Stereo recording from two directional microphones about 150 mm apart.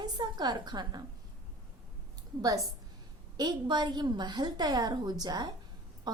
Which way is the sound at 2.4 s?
20° right (ahead or behind).